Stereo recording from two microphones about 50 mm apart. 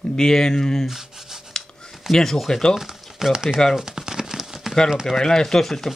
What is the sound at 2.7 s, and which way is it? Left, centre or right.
Speech, centre.